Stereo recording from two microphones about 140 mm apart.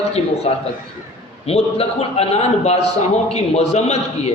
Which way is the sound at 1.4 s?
45° left (ahead or behind).